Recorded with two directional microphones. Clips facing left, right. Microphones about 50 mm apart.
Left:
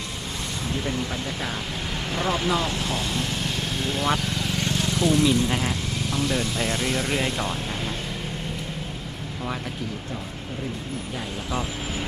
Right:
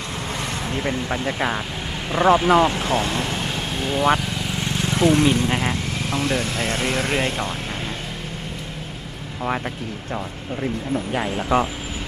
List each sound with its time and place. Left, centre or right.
0.7 s speech: right
2.1 s speech: right
3.8 s vehicle: right
4.9 s speech: right
11.1 s speech: right